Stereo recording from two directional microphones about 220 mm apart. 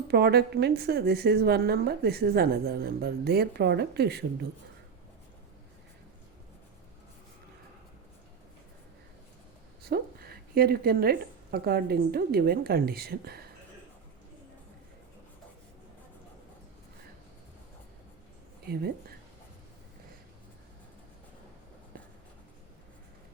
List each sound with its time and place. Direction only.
0.1 s a woman's voice: 45° right (ahead or behind)
9.8 s a woman's voice: 45° right (ahead or behind)
18.6 s speech: 45° right (ahead or behind)